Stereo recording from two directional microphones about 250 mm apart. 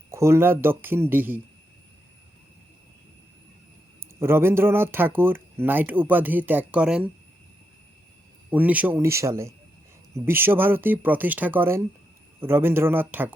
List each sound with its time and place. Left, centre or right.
0.1 s speech: centre
4.2 s speech: centre
8.4 s speech: centre